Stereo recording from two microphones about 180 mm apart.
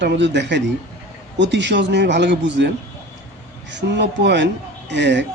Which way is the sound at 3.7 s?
75° right (ahead or behind).